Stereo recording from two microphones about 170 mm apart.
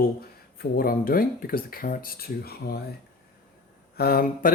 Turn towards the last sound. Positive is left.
turn(degrees=60)  # may be behind; listen again after turning